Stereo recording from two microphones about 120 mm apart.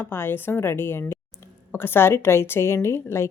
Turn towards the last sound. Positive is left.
turn(degrees=20)  # may be behind; listen again after turning